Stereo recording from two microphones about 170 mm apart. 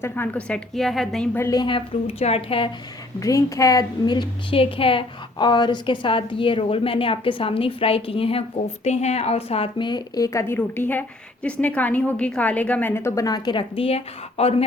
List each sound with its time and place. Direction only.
0.0 s a woman's voice: 10° left (ahead or behind); by 2.6 s 35° left (ahead or behind)
3.2 s a woman's voice: 20° left (ahead or behind); by 14.6 s 35° left (ahead or behind)